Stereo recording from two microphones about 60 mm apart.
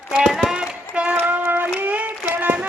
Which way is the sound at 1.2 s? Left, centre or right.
Right.